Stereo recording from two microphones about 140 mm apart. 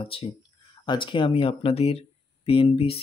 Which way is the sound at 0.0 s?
40° left (ahead or behind).